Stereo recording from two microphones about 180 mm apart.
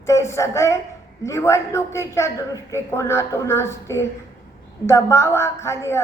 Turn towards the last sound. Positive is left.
turn(degrees=15)  # may be behind; listen again after turning